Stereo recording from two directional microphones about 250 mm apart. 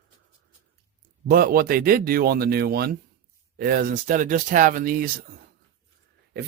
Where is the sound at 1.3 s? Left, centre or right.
Right.